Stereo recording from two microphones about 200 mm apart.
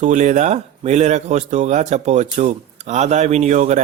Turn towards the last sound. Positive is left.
turn(degrees=-35)  # may be behind; listen again after turning